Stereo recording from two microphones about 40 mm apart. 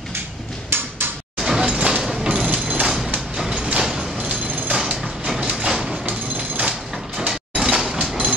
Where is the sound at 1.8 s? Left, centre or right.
Right.